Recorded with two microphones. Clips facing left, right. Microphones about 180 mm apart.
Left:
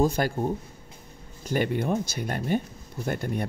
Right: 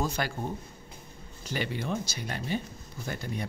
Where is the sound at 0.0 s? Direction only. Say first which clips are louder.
Left 7 dB; 45° left (ahead or behind).